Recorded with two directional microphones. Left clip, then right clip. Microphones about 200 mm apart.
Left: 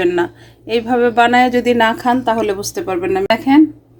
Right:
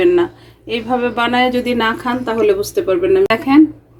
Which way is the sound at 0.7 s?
35° left (ahead or behind).